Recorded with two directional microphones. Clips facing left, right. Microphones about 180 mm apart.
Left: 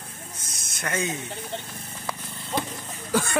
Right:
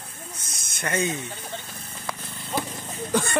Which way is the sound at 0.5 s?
Centre (ahead or behind).